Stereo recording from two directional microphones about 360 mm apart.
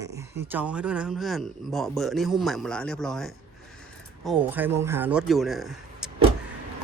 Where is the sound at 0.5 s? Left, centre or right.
Centre.